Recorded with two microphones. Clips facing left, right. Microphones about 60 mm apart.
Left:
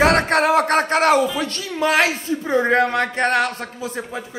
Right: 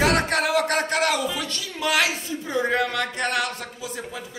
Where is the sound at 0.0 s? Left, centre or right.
Left.